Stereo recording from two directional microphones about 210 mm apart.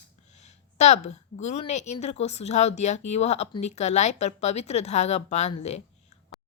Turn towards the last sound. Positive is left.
turn(degrees=30)  # may be behind; listen again after turning